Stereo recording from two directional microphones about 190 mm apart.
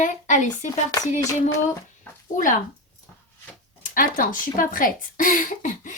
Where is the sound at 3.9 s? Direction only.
45° left (ahead or behind).